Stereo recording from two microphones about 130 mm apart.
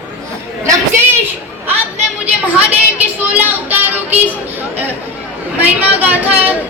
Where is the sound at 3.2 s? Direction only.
15° right (ahead or behind).